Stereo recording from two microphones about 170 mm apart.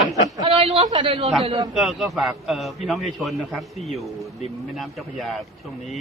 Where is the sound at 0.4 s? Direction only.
30° right (ahead or behind).